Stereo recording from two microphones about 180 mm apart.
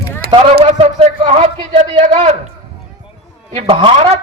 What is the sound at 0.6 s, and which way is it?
A man's voice, 35° right (ahead or behind).